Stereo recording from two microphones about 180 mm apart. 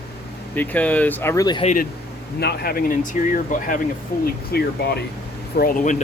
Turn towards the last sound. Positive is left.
turn(degrees=50)  # may be behind; listen again after turning